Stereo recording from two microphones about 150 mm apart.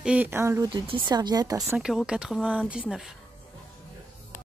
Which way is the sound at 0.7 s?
35° right (ahead or behind).